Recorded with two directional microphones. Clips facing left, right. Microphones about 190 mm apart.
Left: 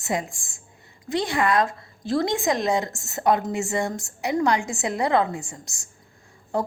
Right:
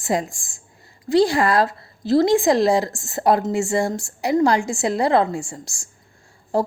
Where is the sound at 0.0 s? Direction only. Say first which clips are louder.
Right 5 dB; 35° right (ahead or behind).